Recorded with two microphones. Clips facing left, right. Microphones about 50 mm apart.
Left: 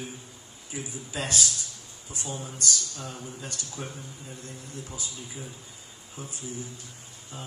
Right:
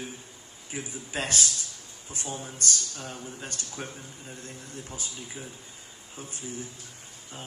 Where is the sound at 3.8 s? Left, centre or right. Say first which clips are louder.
Even; right.